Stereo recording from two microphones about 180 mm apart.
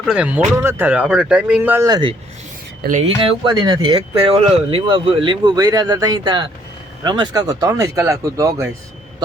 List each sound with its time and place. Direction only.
0.0 s speech: 5° right (ahead or behind)
1.8 s speech: 25° right (ahead or behind)
3.2 s speech: 30° right (ahead or behind)